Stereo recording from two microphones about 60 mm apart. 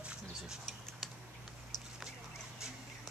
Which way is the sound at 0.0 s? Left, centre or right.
Centre.